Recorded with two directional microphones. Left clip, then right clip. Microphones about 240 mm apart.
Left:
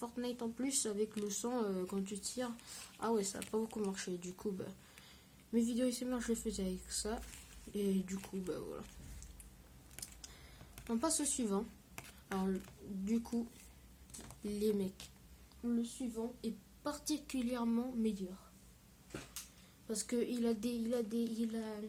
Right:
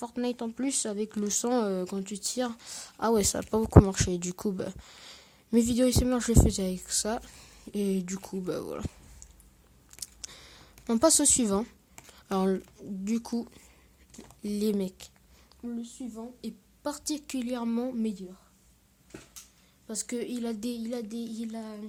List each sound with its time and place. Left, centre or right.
0.0 s speech: right
10.0 s a sound: right
10.8 s speech: right
14.4 s speech: right
19.9 s speech: right